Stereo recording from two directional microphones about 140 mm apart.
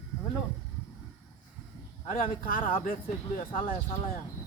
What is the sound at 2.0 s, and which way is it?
Speech, 75° left (ahead or behind).